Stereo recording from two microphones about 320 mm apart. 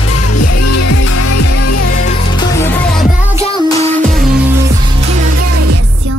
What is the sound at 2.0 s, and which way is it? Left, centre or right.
Music, centre.